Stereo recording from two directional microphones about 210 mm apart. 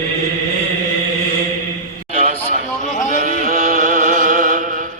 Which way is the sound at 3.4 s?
35° right (ahead or behind).